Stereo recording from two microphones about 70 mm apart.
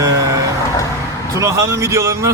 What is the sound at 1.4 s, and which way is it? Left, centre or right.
Speech, right.